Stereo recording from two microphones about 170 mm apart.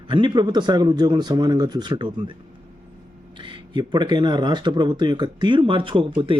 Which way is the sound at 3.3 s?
30° right (ahead or behind).